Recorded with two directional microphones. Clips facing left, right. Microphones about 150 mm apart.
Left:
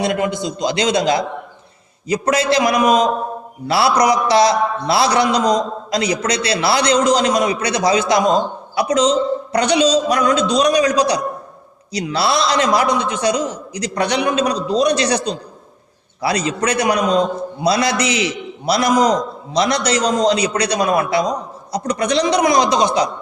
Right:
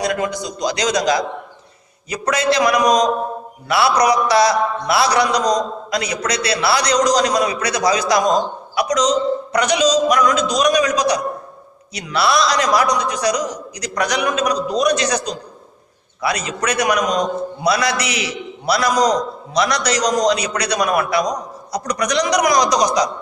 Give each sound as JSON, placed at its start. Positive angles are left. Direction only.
{"t": 0.0, "sound": "a man's voice", "side_deg": 25}
{"t": 3.9, "sound": "a man's voice", "side_deg": -30}
{"t": 4.3, "sound": "a man's voice", "side_deg": 25}